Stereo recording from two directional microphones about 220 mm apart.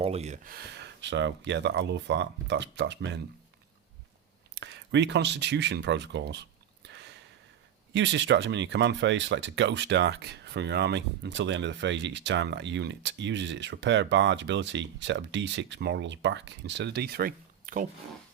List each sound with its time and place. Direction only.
0.0 s speech: 30° right (ahead or behind)
0.5 s speech: 50° right (ahead or behind)
4.5 s speech: 50° right (ahead or behind)
6.8 s a sound: 50° right (ahead or behind)
7.9 s speech: 55° right (ahead or behind); by 17.8 s 40° right (ahead or behind)